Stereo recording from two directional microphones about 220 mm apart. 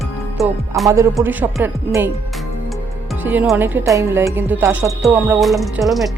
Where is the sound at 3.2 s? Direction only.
10° right (ahead or behind).